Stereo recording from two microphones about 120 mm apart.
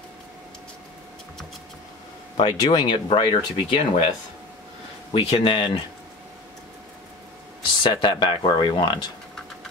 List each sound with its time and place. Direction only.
2.3 s speech: 35° left (ahead or behind)
3.1 s speech: 50° left (ahead or behind)
5.1 s speech: 45° left (ahead or behind)
7.8 s speech: 40° left (ahead or behind)